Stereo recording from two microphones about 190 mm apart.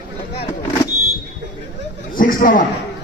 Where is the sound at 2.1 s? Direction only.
45° left (ahead or behind).